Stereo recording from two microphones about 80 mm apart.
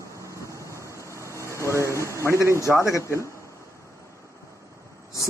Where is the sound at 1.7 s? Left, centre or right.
Right.